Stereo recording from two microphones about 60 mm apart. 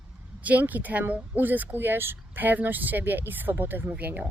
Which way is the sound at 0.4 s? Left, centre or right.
Right.